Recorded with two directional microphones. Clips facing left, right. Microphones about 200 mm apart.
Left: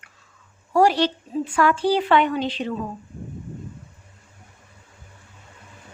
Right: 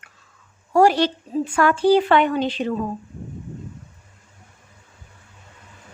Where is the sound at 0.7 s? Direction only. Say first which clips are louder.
Right 2 dB; 50° right (ahead or behind).